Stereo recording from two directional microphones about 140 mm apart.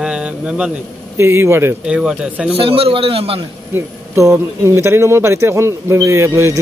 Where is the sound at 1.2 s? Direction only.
20° right (ahead or behind).